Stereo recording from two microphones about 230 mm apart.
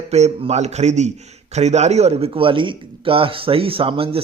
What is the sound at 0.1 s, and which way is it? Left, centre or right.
Speech, right.